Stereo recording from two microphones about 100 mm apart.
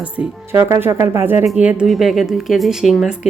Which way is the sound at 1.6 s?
10° right (ahead or behind).